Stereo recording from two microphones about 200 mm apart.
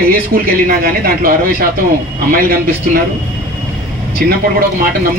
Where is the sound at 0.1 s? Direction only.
45° right (ahead or behind).